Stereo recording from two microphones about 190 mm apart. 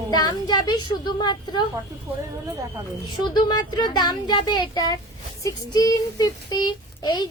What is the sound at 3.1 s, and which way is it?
Child singing, 25° left (ahead or behind).